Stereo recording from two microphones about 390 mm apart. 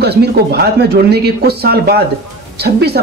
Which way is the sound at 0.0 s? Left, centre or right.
Right.